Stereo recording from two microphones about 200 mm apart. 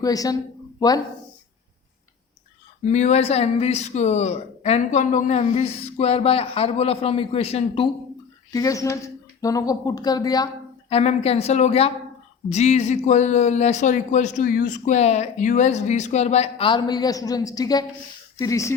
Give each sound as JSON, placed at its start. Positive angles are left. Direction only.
{"t": 0.0, "sound": "speech", "side_deg": 20}
{"t": 2.8, "sound": "speech", "side_deg": 35}
{"t": 8.5, "sound": "speech", "side_deg": 15}